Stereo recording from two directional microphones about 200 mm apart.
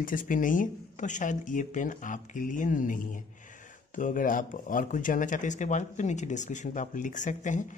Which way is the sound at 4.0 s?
40° left (ahead or behind).